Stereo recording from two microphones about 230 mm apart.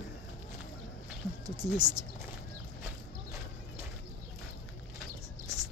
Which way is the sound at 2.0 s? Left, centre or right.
Centre.